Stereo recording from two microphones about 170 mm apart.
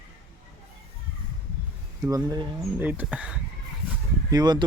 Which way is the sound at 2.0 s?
20° right (ahead or behind).